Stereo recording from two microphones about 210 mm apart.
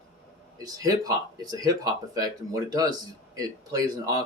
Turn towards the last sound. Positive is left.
turn(degrees=-15)  # may be behind; listen again after turning